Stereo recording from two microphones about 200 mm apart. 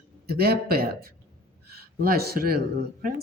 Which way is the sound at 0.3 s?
50° right (ahead or behind).